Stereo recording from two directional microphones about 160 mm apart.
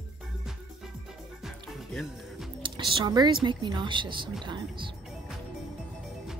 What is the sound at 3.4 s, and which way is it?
A woman's voice, 30° right (ahead or behind).